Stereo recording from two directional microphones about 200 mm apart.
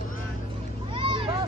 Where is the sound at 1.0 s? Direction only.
25° right (ahead or behind).